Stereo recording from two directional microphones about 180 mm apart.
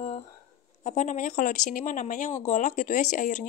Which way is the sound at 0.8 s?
40° left (ahead or behind).